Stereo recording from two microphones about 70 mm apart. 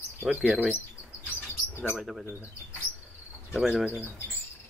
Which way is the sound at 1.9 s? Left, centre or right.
Centre.